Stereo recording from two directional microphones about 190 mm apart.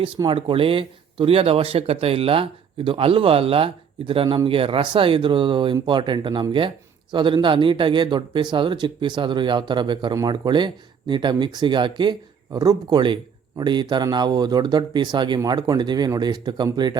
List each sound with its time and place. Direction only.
0.0 s speech: 25° right (ahead or behind)